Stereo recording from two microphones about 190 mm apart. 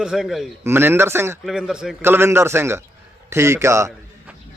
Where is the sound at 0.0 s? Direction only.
5° right (ahead or behind).